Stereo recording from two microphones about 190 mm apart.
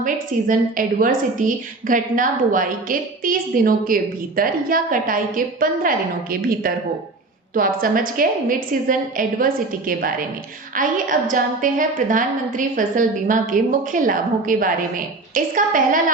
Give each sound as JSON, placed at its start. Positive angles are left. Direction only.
{"t": 0.0, "sound": "a woman's voice", "side_deg": -45}
{"t": 7.5, "sound": "a woman's voice", "side_deg": -45}